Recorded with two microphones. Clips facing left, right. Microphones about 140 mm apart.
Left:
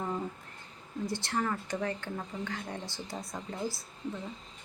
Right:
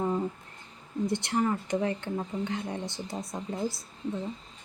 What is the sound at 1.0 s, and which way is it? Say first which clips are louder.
Speech: right 5 dB; 20° right (ahead or behind).